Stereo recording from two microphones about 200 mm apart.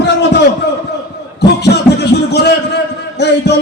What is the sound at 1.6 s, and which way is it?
Music, 55° left (ahead or behind).